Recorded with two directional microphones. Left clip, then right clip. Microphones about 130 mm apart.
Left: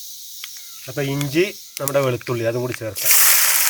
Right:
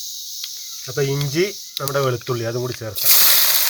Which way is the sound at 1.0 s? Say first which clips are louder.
Left 2 dB; 90° left.